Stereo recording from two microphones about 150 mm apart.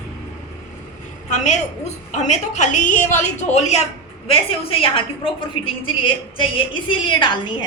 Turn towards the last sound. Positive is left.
turn(degrees=30)  # may be behind; listen again after turning